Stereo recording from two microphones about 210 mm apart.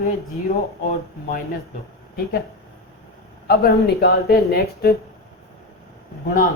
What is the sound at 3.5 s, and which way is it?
Speech, 50° left (ahead or behind).